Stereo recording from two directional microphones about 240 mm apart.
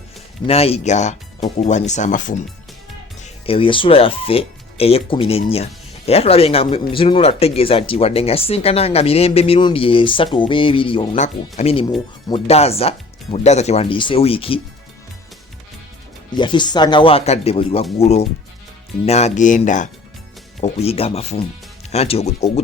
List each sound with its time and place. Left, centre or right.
0.4 s speech: left
3.4 s speech: left
16.3 s speech: centre